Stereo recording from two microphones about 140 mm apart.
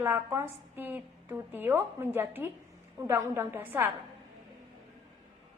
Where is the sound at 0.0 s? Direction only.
15° right (ahead or behind).